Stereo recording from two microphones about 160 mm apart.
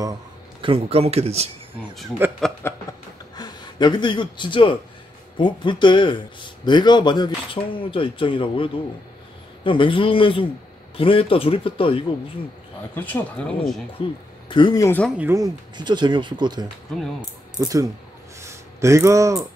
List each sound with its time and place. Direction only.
0.0 s speech: 25° right (ahead or behind)
2.2 s speech: 15° right (ahead or behind)
2.6 s speech: 15° left (ahead or behind)
3.3 s speech: 25° left (ahead or behind)
12.9 s speech: 10° left (ahead or behind)
14.0 s speech: 35° left (ahead or behind)
15.0 s speech: 10° right (ahead or behind); by 16.6 s 30° right (ahead or behind)
16.9 s speech: 5° left (ahead or behind)
17.6 s speech: 20° right (ahead or behind)
18.4 s a sound: 15° right (ahead or behind)